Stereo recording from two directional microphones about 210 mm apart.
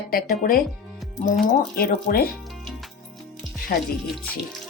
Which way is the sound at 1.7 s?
45° left (ahead or behind).